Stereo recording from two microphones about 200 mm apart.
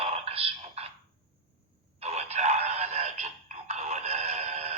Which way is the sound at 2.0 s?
30° right (ahead or behind).